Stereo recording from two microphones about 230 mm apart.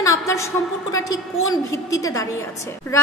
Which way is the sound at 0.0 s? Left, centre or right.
Centre.